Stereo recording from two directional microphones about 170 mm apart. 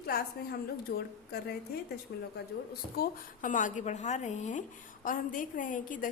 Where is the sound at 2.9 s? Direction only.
60° left (ahead or behind).